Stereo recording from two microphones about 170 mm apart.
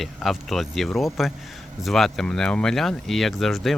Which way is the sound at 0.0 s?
Centre (ahead or behind).